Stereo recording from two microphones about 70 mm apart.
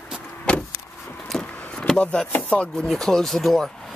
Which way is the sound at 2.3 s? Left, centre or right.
Left.